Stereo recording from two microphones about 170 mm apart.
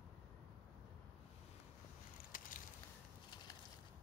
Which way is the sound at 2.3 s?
55° left (ahead or behind).